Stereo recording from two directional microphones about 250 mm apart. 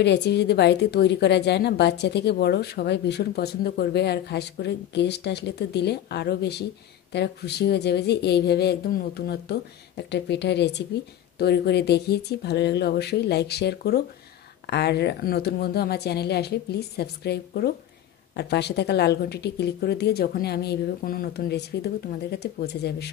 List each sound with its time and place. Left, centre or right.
0.0 s a woman's voice: left